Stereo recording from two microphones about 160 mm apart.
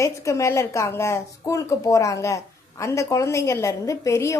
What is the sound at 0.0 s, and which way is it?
Speech, 20° left (ahead or behind).